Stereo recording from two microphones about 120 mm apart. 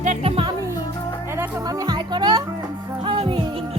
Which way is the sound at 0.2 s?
50° right (ahead or behind).